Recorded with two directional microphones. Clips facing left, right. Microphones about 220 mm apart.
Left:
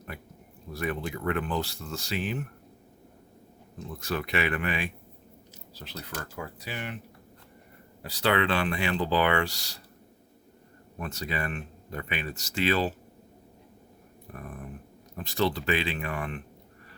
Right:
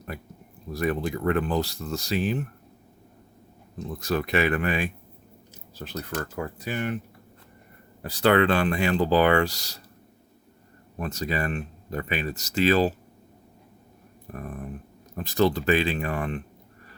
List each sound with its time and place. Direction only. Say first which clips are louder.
0.7 s speech: right 5 dB; 40° right (ahead or behind)
4.0 s speech: right 5 dB; 40° right (ahead or behind)
8.0 s speech: right 6 dB; 50° right (ahead or behind)
11.0 s speech: right 5 dB; 40° right (ahead or behind)
14.3 s speech: right 5 dB; 40° right (ahead or behind)